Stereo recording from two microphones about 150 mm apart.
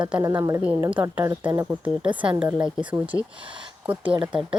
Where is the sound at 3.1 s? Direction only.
20° right (ahead or behind).